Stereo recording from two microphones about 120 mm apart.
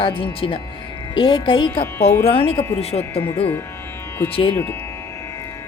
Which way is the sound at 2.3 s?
50° left (ahead or behind).